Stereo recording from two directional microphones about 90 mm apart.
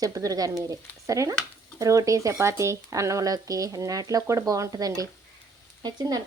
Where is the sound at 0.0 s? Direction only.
40° right (ahead or behind).